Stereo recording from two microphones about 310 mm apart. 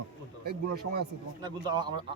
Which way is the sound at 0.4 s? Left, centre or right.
Right.